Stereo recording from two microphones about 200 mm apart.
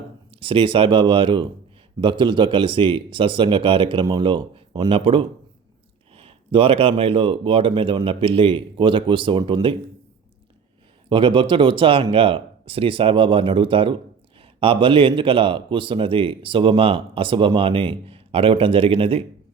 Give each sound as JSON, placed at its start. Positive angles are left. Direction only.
{"t": 0.3, "sound": "speech", "side_deg": -25}
{"t": 11.1, "sound": "speech", "side_deg": -25}